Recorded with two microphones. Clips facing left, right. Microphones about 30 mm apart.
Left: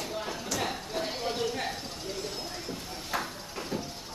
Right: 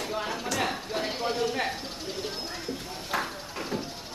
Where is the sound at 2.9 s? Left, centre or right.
Centre.